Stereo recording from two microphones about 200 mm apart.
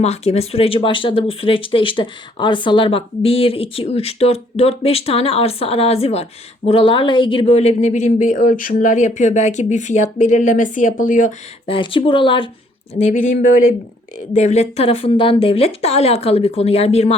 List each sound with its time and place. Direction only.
0.0 s speech: 30° left (ahead or behind)
14.3 s speech: 35° left (ahead or behind)